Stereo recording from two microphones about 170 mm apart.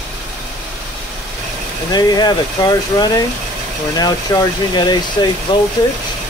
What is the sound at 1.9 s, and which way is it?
Speech, 25° left (ahead or behind).